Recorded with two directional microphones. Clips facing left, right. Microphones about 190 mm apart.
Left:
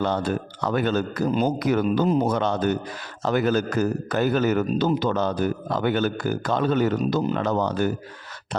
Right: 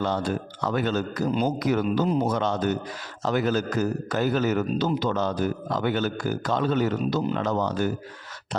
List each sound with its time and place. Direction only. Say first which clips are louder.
0.0 s a man's voice: left 2 dB; 60° left (ahead or behind)